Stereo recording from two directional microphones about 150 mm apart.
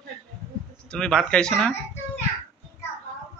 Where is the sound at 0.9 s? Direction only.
5° left (ahead or behind).